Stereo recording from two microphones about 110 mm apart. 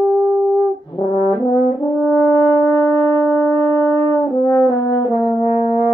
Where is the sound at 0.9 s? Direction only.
40° left (ahead or behind).